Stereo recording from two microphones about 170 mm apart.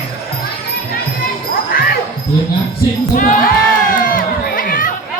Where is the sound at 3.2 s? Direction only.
50° left (ahead or behind).